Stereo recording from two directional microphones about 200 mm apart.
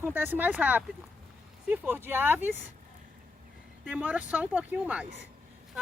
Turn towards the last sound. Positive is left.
turn(degrees=-5)  # may be behind; listen again after turning